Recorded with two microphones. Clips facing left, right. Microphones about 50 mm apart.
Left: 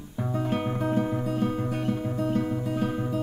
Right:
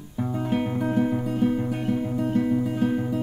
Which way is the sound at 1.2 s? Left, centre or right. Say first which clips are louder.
Right 4 dB; centre.